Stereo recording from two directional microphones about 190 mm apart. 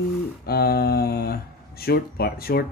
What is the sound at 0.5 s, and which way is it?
Speech, 55° left (ahead or behind).